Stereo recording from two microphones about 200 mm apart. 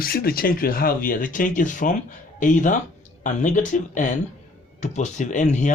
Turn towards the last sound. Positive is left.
turn(degrees=40)  # may be behind; listen again after turning